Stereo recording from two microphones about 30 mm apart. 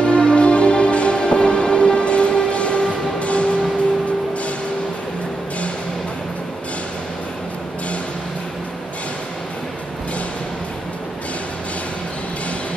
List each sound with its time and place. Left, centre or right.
0.0 s music: left